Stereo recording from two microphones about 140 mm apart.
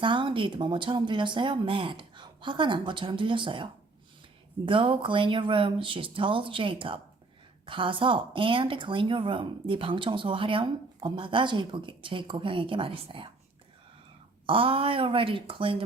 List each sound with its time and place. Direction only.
0.0 s speech: 35° right (ahead or behind)
14.4 s speech: 40° right (ahead or behind)